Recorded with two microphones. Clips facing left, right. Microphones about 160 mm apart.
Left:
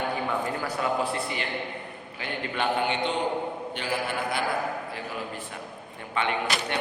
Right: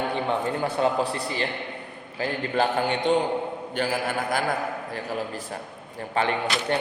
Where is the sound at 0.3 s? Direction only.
25° right (ahead or behind).